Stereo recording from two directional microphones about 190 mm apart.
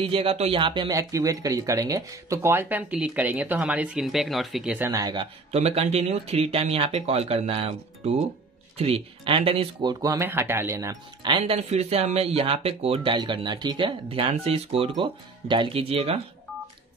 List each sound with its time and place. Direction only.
0.1 s speech: 30° right (ahead or behind)